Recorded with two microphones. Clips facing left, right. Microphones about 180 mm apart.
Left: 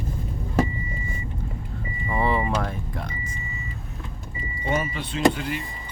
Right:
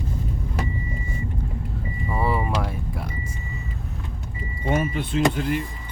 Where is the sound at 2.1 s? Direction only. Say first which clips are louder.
Left 1 dB; 5° right (ahead or behind).